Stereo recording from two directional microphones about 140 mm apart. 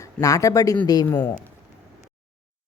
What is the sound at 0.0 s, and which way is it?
Speech, 25° left (ahead or behind).